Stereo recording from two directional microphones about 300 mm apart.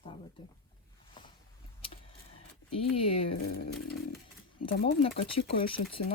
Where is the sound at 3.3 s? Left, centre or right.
Left.